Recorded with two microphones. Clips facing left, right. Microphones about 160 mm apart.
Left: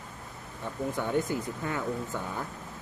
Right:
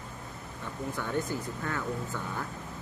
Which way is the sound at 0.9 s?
15° left (ahead or behind).